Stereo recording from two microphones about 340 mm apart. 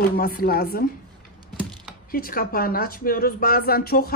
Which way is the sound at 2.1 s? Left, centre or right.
Left.